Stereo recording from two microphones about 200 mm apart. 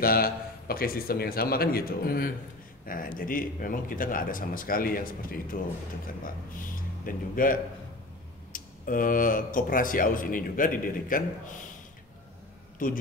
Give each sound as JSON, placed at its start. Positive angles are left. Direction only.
{"t": 0.0, "sound": "speech", "side_deg": 45}
{"t": 8.5, "sound": "speech", "side_deg": 45}
{"t": 12.7, "sound": "a man's voice", "side_deg": 45}